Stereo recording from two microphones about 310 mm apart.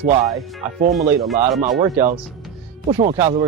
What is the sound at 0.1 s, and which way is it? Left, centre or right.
Speech, centre.